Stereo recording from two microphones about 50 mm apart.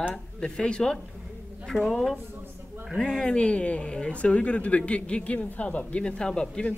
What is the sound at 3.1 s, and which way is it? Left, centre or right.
Speech, centre.